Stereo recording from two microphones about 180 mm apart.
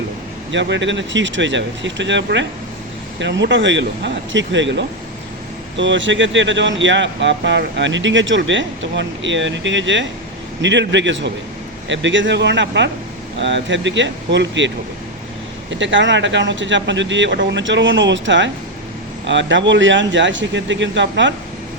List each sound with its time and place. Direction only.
0.5 s speech: 85° right
15.7 s speech: 90° right